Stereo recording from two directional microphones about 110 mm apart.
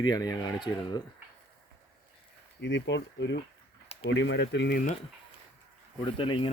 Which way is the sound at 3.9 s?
70° left (ahead or behind).